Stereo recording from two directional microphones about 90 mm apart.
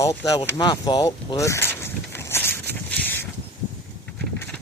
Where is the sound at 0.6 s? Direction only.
50° left (ahead or behind).